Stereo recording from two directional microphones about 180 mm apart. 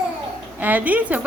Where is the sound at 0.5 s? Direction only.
10° right (ahead or behind).